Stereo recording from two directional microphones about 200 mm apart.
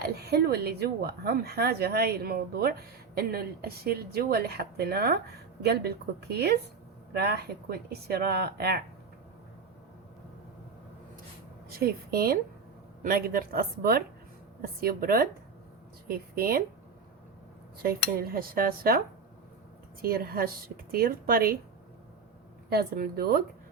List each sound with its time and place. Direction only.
0.0 s speech: 55° right (ahead or behind)
11.7 s a woman's voice: 50° right (ahead or behind)
17.8 s speech: 45° right (ahead or behind)
22.7 s speech: 50° right (ahead or behind)